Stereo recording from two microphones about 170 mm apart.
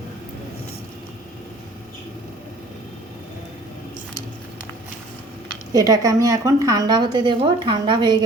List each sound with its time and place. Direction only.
5.7 s a woman's voice: 20° right (ahead or behind)